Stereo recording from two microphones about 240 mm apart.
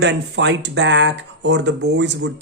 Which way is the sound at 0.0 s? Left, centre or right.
Right.